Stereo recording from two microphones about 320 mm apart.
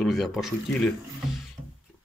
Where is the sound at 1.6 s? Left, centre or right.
Centre.